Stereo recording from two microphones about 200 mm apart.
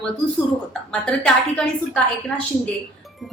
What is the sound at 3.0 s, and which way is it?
Music, centre (ahead or behind).